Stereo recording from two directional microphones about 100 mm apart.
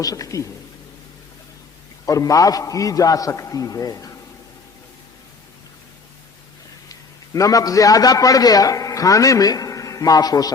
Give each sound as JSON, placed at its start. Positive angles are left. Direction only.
{"t": 0.0, "sound": "a man's voice", "side_deg": 35}
{"t": 2.0, "sound": "a man's voice", "side_deg": 35}
{"t": 7.3, "sound": "a man's voice", "side_deg": 35}